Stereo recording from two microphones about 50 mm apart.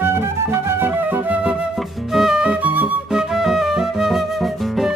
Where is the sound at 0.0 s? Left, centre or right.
Right.